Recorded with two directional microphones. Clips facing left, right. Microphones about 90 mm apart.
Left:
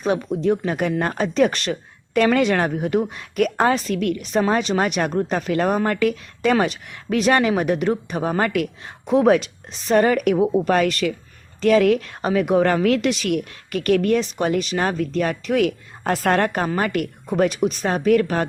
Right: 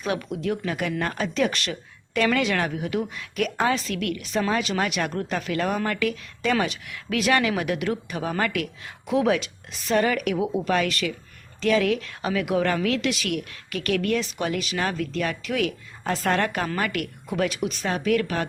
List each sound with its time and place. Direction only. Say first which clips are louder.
0.0 s speech: left 7 dB; 35° left (ahead or behind)